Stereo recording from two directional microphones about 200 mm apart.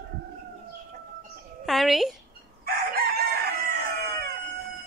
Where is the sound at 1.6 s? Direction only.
Centre (ahead or behind).